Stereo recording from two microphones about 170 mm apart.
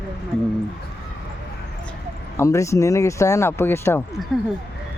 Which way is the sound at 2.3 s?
15° left (ahead or behind).